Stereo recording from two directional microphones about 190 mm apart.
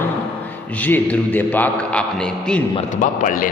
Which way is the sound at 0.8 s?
10° left (ahead or behind).